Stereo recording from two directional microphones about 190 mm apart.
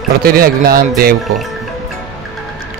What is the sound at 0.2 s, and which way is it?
Speech, 50° right (ahead or behind).